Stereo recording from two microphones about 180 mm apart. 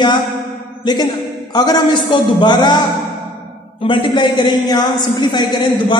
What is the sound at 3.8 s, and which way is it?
A woman's voice, 25° left (ahead or behind).